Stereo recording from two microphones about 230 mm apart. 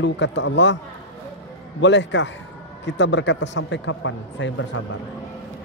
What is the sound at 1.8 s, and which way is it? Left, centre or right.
A man's voice, left.